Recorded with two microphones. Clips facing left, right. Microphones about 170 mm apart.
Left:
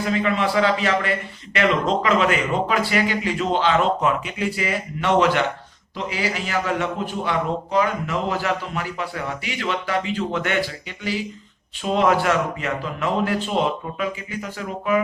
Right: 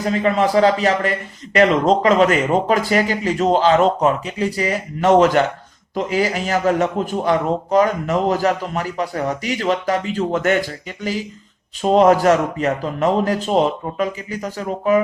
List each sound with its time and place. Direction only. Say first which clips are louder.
0.0 s a man's voice: right 4 dB; 40° right (ahead or behind)